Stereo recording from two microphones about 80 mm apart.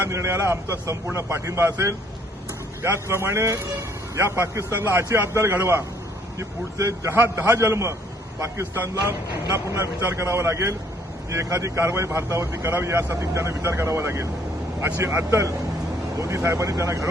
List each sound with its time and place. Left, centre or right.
0.1 s speech: right
7.1 s speech: right
9.6 s speech: right